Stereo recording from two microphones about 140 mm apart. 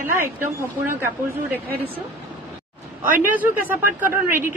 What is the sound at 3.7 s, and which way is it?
Speech, 15° right (ahead or behind).